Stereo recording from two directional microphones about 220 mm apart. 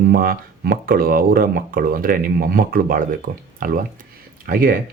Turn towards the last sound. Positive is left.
turn(degrees=-40)  # may be behind; listen again after turning